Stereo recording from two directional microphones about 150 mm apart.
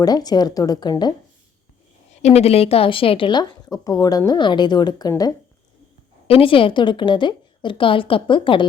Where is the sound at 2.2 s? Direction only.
45° left (ahead or behind); by 5.3 s 25° left (ahead or behind).